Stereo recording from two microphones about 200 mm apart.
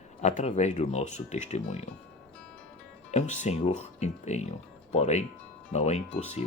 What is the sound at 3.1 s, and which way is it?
Speech, 35° left (ahead or behind).